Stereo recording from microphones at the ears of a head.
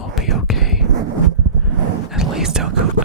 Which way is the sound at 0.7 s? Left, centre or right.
Right.